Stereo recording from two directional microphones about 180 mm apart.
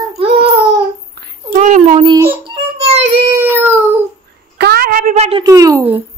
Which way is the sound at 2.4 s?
30° right (ahead or behind).